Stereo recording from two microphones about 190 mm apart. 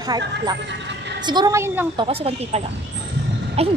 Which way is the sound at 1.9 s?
30° right (ahead or behind).